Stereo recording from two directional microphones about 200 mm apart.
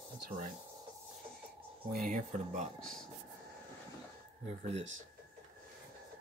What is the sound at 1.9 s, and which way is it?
Speech, 40° right (ahead or behind).